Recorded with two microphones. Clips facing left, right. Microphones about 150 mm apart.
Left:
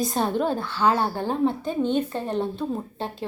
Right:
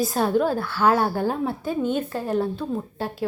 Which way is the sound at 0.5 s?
15° left (ahead or behind).